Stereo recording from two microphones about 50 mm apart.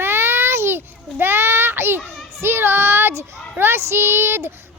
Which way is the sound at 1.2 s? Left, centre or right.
Right.